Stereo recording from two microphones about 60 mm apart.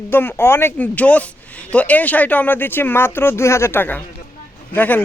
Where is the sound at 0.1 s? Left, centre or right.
Left.